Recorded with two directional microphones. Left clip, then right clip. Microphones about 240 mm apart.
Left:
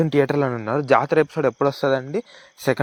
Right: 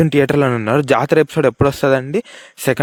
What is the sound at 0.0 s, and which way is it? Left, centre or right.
Speech, right.